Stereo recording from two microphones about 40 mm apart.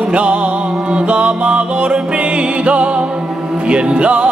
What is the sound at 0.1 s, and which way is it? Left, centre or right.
Music, right.